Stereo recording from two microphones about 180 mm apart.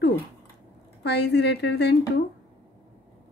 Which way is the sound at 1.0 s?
70° left (ahead or behind).